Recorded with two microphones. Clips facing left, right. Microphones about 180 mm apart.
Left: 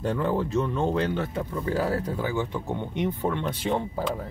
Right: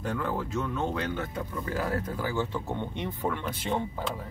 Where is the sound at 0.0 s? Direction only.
35° left (ahead or behind).